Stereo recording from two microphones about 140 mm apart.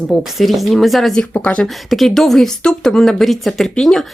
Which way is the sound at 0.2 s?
Centre (ahead or behind).